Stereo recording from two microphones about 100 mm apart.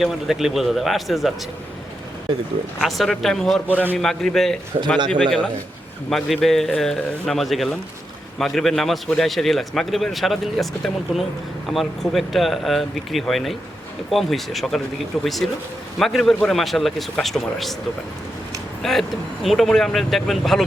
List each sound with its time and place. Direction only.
0.0 s a man's voice: 5° right (ahead or behind)
2.8 s a man's voice: centre (ahead or behind)
4.9 s a man's voice: 50° right (ahead or behind)
6.1 s a man's voice: centre (ahead or behind)
18.8 s a man's voice: centre (ahead or behind)